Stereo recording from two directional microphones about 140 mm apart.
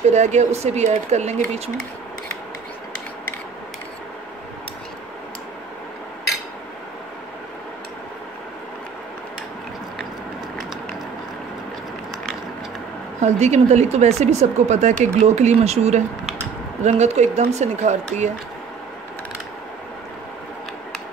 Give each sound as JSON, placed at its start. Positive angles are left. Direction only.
{"t": 0.0, "sound": "speech", "side_deg": -55}
{"t": 13.2, "sound": "speech", "side_deg": -55}